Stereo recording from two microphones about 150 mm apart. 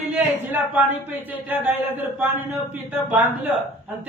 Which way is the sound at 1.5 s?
10° right (ahead or behind).